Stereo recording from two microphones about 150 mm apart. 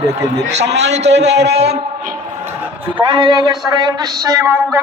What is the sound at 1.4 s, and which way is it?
Speech, 90° right.